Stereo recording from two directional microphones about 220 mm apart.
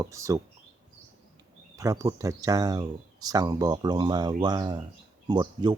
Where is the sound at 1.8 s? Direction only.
15° right (ahead or behind).